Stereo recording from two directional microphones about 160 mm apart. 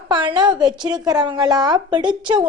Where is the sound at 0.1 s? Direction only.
30° right (ahead or behind).